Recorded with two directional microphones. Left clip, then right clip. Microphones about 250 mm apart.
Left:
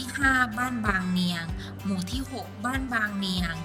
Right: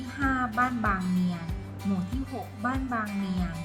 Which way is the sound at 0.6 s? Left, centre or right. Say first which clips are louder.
Right 3 dB; centre.